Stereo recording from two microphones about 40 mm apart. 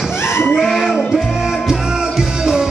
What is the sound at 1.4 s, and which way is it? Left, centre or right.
Music, centre.